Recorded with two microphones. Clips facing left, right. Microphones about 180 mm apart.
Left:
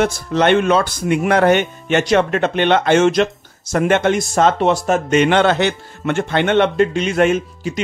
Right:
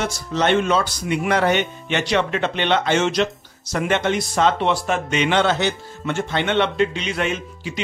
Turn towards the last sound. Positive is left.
turn(degrees=45)  # may be behind; listen again after turning